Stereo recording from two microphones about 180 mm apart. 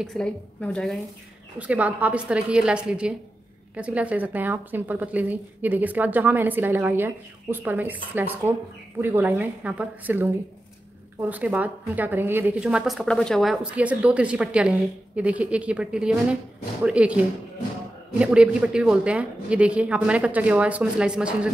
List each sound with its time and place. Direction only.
0.0 s a woman's voice: 5° left (ahead or behind)
1.6 s a woman's voice: 10° right (ahead or behind)